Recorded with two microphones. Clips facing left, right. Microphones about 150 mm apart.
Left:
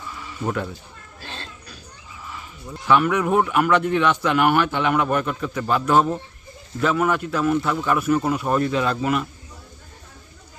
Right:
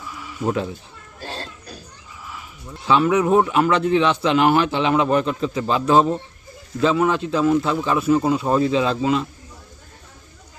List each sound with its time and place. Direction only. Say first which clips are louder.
0.0 s bleat: right 3 dB; 5° right (ahead or behind)
1.2 s children playing: right 5 dB; 40° right (ahead or behind)
2.8 s a man's voice: right 2 dB; 20° right (ahead or behind)